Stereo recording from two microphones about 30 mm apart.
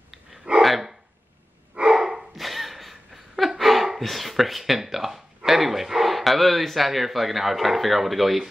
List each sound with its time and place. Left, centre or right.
0.6 s dog: centre
2.0 s dog: centre
2.3 s a sound: centre
4.0 s speech: centre